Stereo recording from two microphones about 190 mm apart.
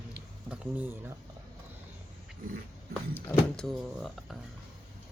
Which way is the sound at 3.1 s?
5° left (ahead or behind).